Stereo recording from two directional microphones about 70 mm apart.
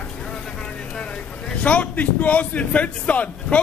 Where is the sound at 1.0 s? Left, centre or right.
Centre.